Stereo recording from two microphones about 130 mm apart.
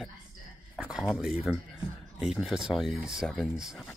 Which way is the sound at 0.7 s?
5° right (ahead or behind).